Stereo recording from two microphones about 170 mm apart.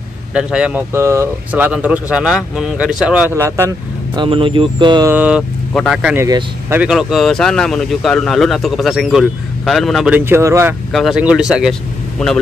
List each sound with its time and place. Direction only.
0.3 s speech: 5° right (ahead or behind)
4.2 s speech: 30° right (ahead or behind)
5.1 s speech: 10° right (ahead or behind)
6.1 s speech: 15° right (ahead or behind)
6.8 s speech: 5° right (ahead or behind)
10.1 s speech: 15° right (ahead or behind)
10.9 s speech: centre (ahead or behind)